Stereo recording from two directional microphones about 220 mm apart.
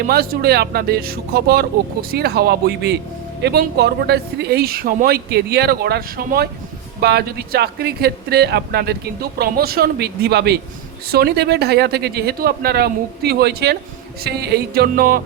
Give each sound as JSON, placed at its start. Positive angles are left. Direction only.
{"t": 0.1, "sound": "speech", "side_deg": -45}